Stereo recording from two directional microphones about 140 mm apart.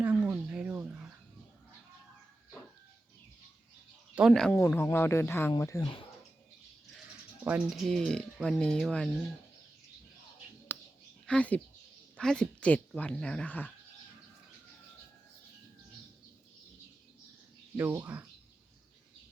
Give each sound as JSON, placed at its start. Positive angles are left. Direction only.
{"t": 0.0, "sound": "a sound", "side_deg": -10}
{"t": 4.1, "sound": "speech", "side_deg": -5}
{"t": 4.8, "sound": "speech", "side_deg": 15}
{"t": 7.4, "sound": "speech", "side_deg": -10}
{"t": 10.7, "sound": "a sound", "side_deg": 15}
{"t": 11.3, "sound": "speech", "side_deg": 10}
{"t": 17.7, "sound": "speech", "side_deg": -15}